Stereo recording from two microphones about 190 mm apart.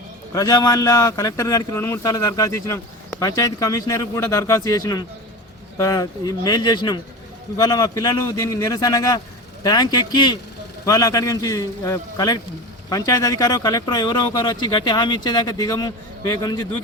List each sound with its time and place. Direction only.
0.3 s a man's voice: 20° left (ahead or behind)